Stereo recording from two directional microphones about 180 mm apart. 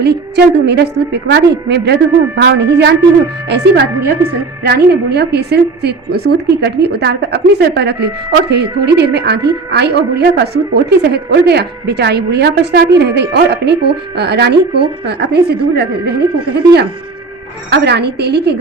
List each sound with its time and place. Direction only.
0.0 s a woman's voice: 65° right (ahead or behind)
17.7 s a woman's voice: 70° right (ahead or behind)